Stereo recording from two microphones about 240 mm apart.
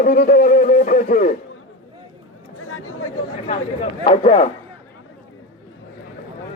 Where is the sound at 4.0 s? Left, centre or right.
Left.